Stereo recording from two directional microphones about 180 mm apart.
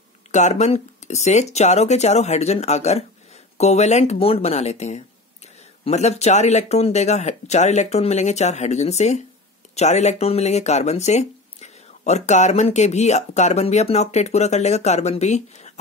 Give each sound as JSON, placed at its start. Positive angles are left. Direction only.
{"t": 0.3, "sound": "speech", "side_deg": 40}